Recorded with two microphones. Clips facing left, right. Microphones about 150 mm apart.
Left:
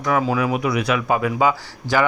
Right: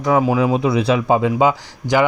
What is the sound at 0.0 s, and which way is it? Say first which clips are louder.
Speech: right 4 dB; 20° right (ahead or behind).